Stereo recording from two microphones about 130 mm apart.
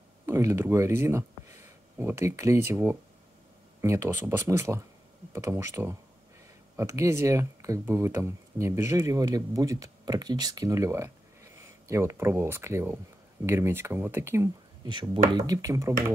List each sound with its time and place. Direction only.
0.3 s speech: 20° right (ahead or behind)
14.9 s speech: 35° right (ahead or behind)